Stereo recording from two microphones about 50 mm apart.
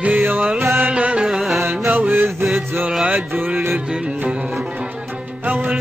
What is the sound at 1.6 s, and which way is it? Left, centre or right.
Music, right.